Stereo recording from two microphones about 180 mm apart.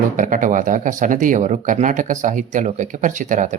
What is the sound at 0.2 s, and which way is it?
Speech, 45° right (ahead or behind).